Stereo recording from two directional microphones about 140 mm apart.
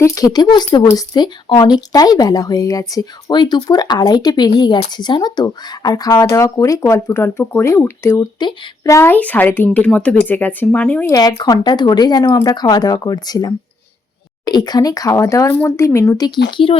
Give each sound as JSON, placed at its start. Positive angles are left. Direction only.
{"t": 0.0, "sound": "a woman's voice", "side_deg": 25}
{"t": 11.1, "sound": "a woman's voice", "side_deg": 25}